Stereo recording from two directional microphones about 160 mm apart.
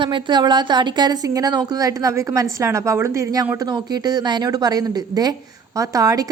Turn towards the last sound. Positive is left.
turn(degrees=-20)  # may be behind; listen again after turning